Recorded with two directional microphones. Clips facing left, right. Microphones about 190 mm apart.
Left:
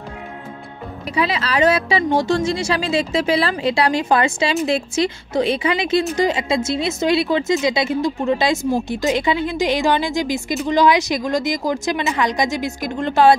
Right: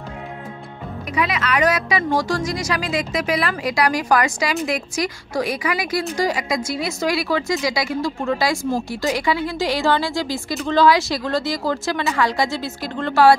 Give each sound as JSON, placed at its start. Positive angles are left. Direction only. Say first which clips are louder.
{"t": 1.1, "sound": "speech", "louder": "left 1 dB", "side_deg": 30}